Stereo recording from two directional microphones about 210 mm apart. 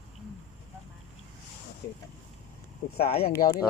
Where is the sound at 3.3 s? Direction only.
15° left (ahead or behind).